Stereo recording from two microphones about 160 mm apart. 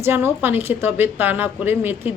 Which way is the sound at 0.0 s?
15° right (ahead or behind).